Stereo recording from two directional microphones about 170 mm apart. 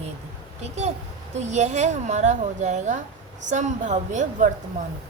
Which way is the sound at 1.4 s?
45° right (ahead or behind).